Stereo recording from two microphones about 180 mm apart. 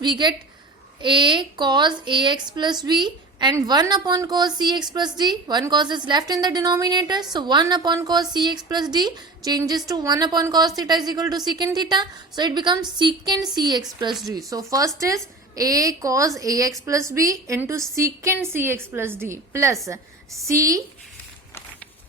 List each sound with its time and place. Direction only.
0.0 s a woman's voice: 25° right (ahead or behind)
14.1 s speech: centre (ahead or behind)
14.5 s a woman's voice: 20° right (ahead or behind)